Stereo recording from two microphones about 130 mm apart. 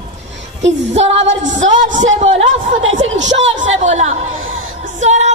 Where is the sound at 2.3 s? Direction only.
50° right (ahead or behind).